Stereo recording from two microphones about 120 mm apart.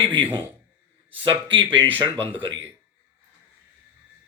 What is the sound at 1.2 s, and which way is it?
Speech, 45° right (ahead or behind).